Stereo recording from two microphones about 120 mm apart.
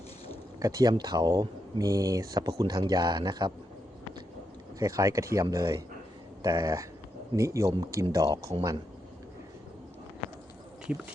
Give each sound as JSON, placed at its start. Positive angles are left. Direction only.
{"t": 0.6, "sound": "speech", "side_deg": -30}
{"t": 4.8, "sound": "speech", "side_deg": -25}